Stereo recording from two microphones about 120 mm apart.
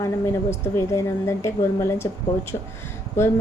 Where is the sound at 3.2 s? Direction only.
20° left (ahead or behind).